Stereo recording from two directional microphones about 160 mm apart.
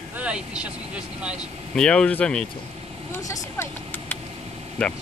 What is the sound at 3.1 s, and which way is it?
Speech, 15° left (ahead or behind).